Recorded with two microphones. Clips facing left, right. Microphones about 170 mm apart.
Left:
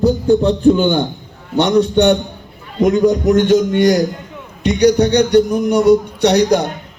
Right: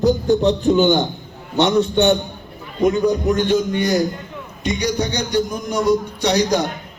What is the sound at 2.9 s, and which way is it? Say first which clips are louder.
A man's voice: left 5 dB; 85° left.